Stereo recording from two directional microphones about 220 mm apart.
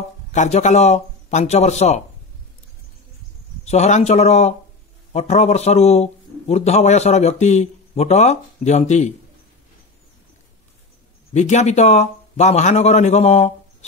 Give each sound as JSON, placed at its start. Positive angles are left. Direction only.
{"t": 0.3, "sound": "a man's voice", "side_deg": 35}
{"t": 3.6, "sound": "a man's voice", "side_deg": 30}
{"t": 11.3, "sound": "a man's voice", "side_deg": 30}